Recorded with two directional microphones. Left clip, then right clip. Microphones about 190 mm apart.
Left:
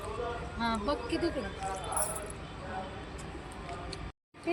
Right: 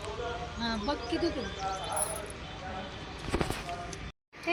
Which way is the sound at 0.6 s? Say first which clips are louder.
Left 2 dB; centre (ahead or behind).